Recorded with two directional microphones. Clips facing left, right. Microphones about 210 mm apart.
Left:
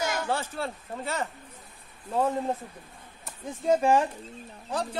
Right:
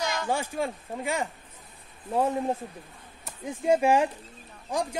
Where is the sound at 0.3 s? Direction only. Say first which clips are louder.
Right 2 dB; 10° right (ahead or behind).